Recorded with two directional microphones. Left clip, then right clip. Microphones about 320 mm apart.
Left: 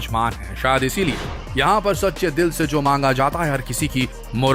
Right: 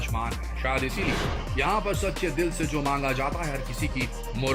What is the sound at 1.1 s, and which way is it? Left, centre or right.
Speech, centre.